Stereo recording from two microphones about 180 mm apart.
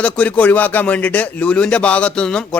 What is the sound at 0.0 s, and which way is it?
A man's voice, 5° left (ahead or behind).